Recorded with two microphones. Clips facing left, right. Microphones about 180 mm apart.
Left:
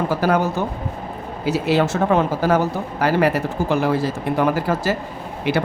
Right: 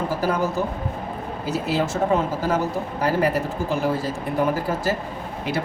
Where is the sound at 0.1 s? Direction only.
75° left (ahead or behind).